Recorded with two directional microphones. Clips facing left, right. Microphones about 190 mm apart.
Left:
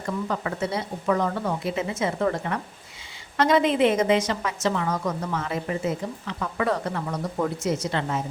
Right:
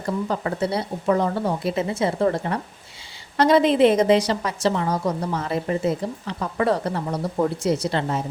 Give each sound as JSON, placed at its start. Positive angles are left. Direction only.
{"t": 0.0, "sound": "a woman's voice", "side_deg": -35}